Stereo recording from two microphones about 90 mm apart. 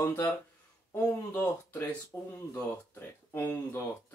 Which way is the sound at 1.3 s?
25° left (ahead or behind).